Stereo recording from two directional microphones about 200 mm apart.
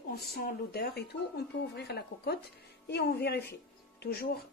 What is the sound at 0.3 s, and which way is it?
A woman's voice, 50° left (ahead or behind).